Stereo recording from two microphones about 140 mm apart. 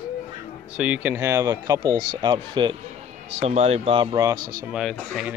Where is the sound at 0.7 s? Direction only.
10° right (ahead or behind); by 2.7 s 35° right (ahead or behind).